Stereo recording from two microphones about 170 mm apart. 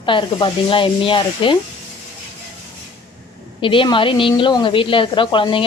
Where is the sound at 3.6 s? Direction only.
30° left (ahead or behind).